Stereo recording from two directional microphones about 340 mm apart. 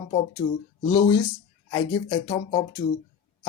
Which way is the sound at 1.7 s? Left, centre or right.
Centre.